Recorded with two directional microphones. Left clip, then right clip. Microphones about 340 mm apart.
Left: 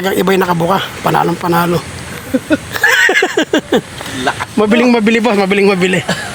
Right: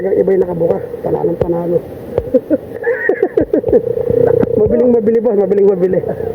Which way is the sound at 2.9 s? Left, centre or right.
Left.